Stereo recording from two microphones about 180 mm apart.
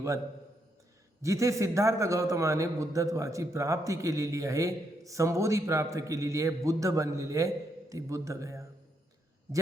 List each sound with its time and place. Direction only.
1.2 s a man's voice: 15° right (ahead or behind)